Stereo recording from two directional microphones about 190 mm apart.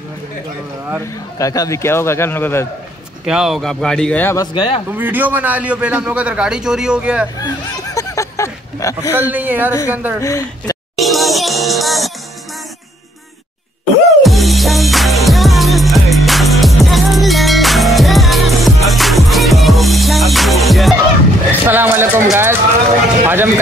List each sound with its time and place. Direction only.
1.4 s a man's voice: 15° left (ahead or behind)
3.3 s speech: centre (ahead or behind)
4.6 s speech: 30° left (ahead or behind)
4.8 s a man's voice: 10° right (ahead or behind)
7.3 s a sound: 20° left (ahead or behind)
9.3 s a man's voice: 10° right (ahead or behind)
10.2 s a man's voice: 15° left (ahead or behind)
11.0 s music: centre (ahead or behind)
14.2 s music: centre (ahead or behind)
21.5 s a sound: 10° right (ahead or behind)